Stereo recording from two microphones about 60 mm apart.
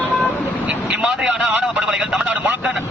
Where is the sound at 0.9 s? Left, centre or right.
Right.